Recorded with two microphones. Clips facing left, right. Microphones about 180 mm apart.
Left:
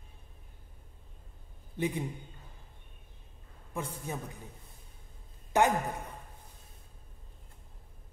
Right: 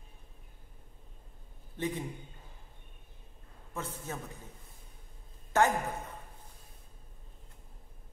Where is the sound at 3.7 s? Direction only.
15° left (ahead or behind).